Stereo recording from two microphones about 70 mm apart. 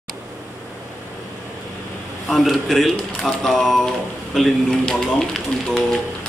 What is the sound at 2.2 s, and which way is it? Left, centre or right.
Speech, centre.